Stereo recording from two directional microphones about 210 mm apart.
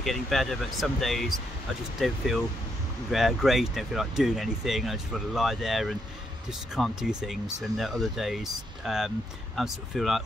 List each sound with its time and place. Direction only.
0.0 s speech: centre (ahead or behind)